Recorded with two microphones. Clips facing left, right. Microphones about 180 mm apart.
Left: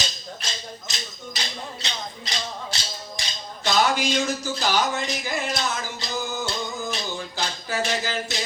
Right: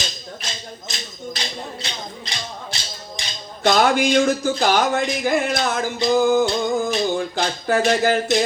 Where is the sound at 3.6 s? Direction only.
55° right (ahead or behind).